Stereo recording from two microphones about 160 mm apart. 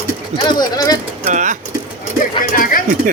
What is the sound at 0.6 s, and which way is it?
Speech, 20° left (ahead or behind).